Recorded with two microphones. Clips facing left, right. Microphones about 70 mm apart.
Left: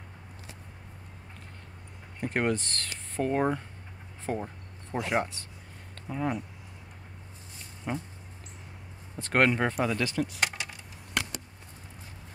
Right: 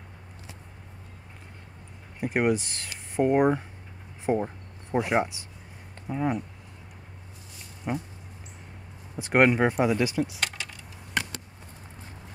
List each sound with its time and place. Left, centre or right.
2.1 s speech: centre
7.9 s speech: centre
9.1 s speech: centre
10.4 s keys jangling: centre